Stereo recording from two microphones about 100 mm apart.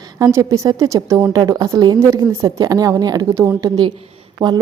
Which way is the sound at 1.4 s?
40° right (ahead or behind).